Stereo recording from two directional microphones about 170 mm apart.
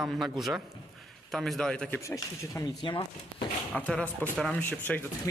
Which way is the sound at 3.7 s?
5° left (ahead or behind).